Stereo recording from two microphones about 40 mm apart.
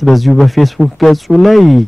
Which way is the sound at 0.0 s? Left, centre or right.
Centre.